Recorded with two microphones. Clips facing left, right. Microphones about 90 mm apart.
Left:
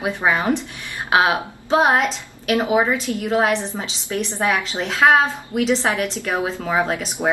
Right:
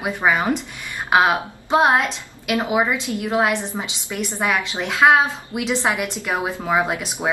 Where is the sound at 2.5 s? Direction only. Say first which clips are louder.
Left 2 dB; 25° left (ahead or behind).